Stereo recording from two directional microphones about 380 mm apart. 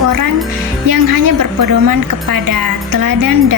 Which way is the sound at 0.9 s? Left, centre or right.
Right.